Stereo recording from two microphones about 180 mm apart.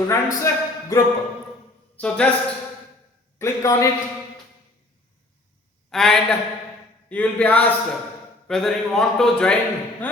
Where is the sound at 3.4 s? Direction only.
15° left (ahead or behind).